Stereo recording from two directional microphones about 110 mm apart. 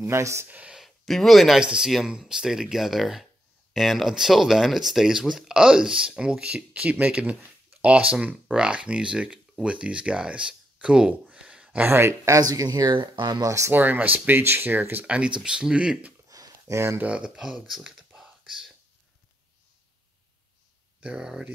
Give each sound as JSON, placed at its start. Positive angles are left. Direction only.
{"t": 0.0, "sound": "speech", "side_deg": -25}
{"t": 0.5, "sound": "speech", "side_deg": -10}
{"t": 12.4, "sound": "speech", "side_deg": -35}
{"t": 16.3, "sound": "a sound", "side_deg": -35}
{"t": 17.0, "sound": "speech", "side_deg": -10}
{"t": 21.0, "sound": "speech", "side_deg": -10}